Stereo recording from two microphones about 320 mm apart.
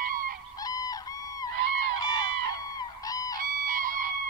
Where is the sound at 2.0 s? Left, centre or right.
Centre.